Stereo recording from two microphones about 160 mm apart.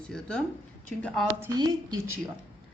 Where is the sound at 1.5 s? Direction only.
25° right (ahead or behind).